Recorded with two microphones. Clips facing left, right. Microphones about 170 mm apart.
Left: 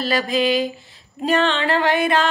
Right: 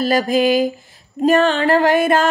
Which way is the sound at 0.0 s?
45° right (ahead or behind).